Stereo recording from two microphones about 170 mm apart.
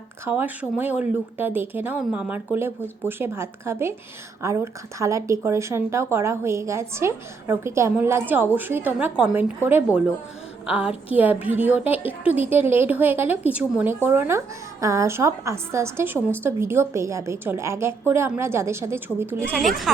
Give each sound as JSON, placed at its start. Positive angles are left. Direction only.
{"t": 0.3, "sound": "a woman's voice", "side_deg": -10}
{"t": 19.6, "sound": "speech", "side_deg": 0}